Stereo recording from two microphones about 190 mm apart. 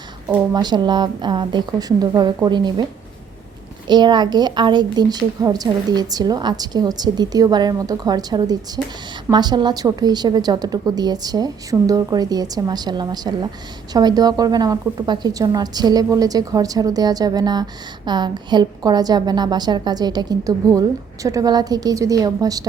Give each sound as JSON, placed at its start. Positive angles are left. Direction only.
{"t": 0.5, "sound": "a woman's voice", "side_deg": -20}
{"t": 3.8, "sound": "a woman's voice", "side_deg": -25}